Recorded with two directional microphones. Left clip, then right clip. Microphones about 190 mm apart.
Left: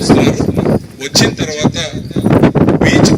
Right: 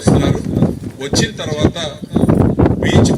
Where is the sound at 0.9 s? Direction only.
45° right (ahead or behind).